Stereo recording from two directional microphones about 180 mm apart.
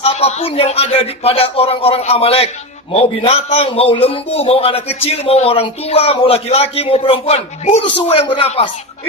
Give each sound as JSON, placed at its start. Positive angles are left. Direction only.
{"t": 0.0, "sound": "a man's voice", "side_deg": 35}